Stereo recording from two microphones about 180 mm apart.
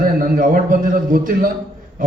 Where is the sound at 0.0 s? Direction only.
50° right (ahead or behind).